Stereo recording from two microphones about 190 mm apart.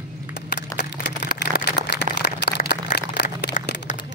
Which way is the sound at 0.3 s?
60° left (ahead or behind).